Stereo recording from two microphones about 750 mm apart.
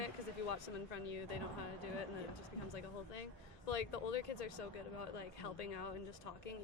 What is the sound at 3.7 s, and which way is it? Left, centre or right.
Speech, left.